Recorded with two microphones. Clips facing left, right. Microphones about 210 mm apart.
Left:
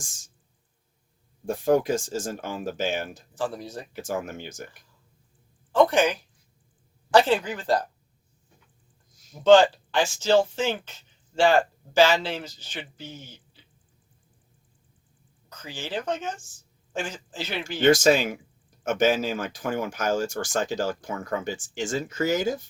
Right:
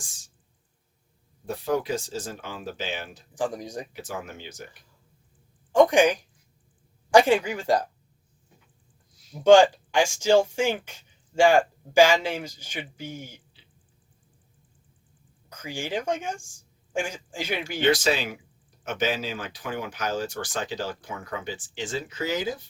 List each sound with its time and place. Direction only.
0.0 s a sound: 45° left (ahead or behind)
1.5 s speech: 45° left (ahead or behind)
3.3 s speech: 15° right (ahead or behind)
3.9 s speech: 45° left (ahead or behind)
5.7 s speech: 15° right (ahead or behind)
9.4 s speech: 10° right (ahead or behind)
15.4 s speech: 10° right (ahead or behind)
17.7 s speech: 45° left (ahead or behind)